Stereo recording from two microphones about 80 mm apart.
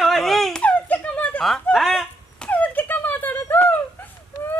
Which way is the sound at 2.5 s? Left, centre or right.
Left.